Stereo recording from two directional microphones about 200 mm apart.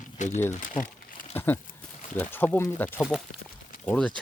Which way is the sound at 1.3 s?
10° left (ahead or behind).